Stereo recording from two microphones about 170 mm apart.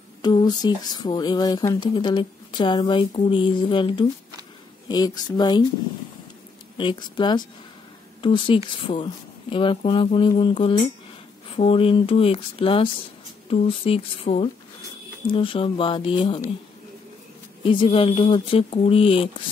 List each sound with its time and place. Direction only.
0.2 s speech: 25° left (ahead or behind)
6.8 s speech: 25° left (ahead or behind)
17.6 s speech: 30° left (ahead or behind)